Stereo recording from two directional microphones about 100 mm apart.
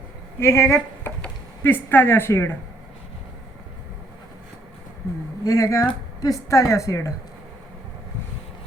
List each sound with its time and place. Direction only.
0.3 s speech: 25° left (ahead or behind)
5.5 s a woman's voice: 30° left (ahead or behind)